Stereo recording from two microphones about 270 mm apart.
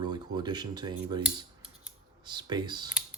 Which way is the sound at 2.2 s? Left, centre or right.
Centre.